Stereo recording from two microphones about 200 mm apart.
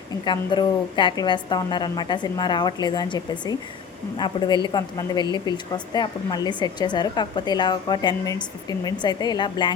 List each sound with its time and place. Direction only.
0.3 s speech: 25° left (ahead or behind)